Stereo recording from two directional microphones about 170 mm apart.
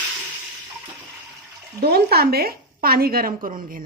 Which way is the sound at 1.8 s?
65° right (ahead or behind).